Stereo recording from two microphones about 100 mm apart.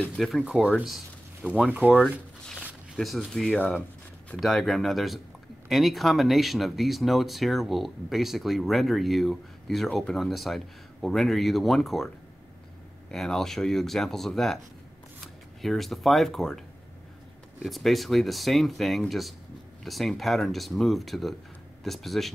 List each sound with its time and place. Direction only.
0.2 s speech: centre (ahead or behind)
0.8 s a sound: centre (ahead or behind)
1.7 s speech: 15° right (ahead or behind)
3.0 s speech: centre (ahead or behind)
3.5 s speech: 15° left (ahead or behind)
4.4 s speech: centre (ahead or behind)
13.1 s speech: 5° left (ahead or behind)
15.6 s speech: centre (ahead or behind)